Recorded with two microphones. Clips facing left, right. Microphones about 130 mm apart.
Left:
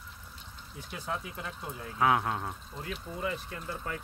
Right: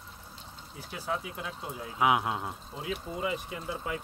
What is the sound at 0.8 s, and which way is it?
Speech, 5° right (ahead or behind).